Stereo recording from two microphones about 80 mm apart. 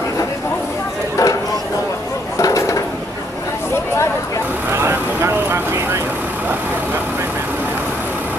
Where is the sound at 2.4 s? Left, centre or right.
Left.